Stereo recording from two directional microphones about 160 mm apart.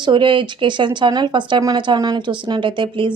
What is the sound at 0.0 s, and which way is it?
Speech, 30° right (ahead or behind).